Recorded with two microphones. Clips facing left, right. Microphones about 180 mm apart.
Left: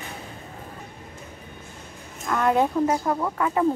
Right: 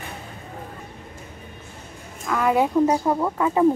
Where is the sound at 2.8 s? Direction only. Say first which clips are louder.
Right 3 dB; 20° right (ahead or behind).